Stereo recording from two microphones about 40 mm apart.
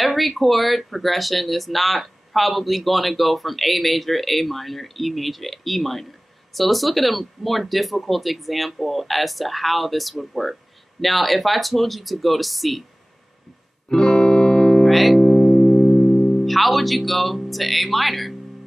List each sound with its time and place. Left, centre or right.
0.0 s speech: centre
13.8 s music: centre
14.9 s speech: centre
15.2 s music: centre
16.4 s speech: centre